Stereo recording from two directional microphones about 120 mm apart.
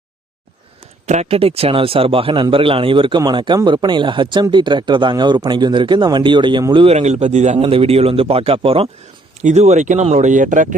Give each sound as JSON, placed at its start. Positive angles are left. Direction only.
{"t": 1.0, "sound": "a man's voice", "side_deg": -70}
{"t": 6.8, "sound": "a man's voice", "side_deg": -65}
{"t": 9.4, "sound": "speech", "side_deg": -70}